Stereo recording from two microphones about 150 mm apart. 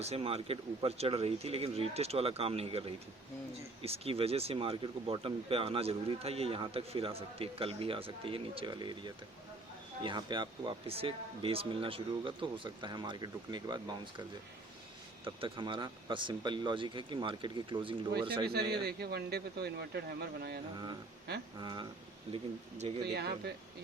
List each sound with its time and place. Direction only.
0.0 s speech: 40° right (ahead or behind)
15.2 s speech: 35° right (ahead or behind)
18.7 s a man's voice: 90° right
21.6 s speech: 30° right (ahead or behind)
23.0 s a man's voice: 90° right